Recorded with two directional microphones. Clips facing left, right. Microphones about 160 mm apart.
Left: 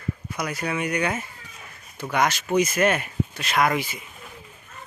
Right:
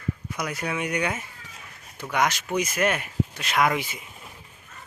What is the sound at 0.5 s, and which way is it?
Speech, 20° right (ahead or behind).